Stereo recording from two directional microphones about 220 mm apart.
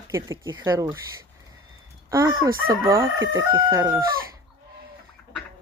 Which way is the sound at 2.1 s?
15° right (ahead or behind).